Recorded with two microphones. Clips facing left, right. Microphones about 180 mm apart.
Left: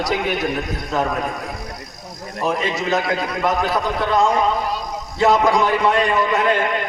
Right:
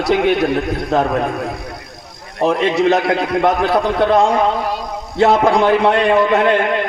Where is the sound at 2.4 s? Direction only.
60° right (ahead or behind).